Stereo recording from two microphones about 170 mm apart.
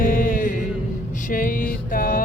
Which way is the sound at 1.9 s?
60° left (ahead or behind).